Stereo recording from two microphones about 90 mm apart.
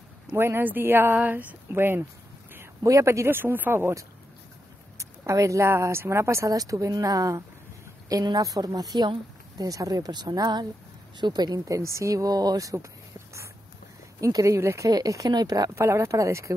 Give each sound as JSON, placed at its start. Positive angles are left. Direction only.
{"t": 0.4, "sound": "speech", "side_deg": -25}
{"t": 14.2, "sound": "speech", "side_deg": -35}